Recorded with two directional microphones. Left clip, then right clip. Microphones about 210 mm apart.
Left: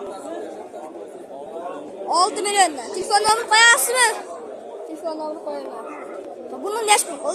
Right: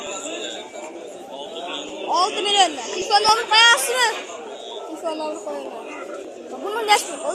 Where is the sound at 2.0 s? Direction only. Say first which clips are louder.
Even; 15° left (ahead or behind).